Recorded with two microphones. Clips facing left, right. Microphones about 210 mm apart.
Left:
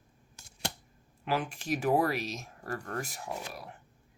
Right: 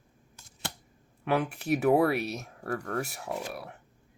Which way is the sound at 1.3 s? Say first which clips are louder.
Right 5 dB; 70° right (ahead or behind).